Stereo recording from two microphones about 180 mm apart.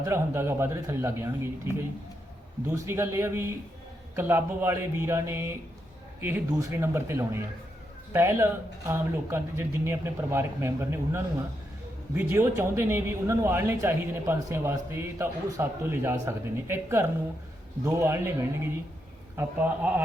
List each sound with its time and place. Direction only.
0.0 s a man's voice: 15° right (ahead or behind)